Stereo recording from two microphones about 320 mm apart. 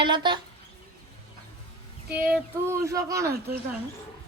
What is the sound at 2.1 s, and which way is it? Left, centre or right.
Speech, centre.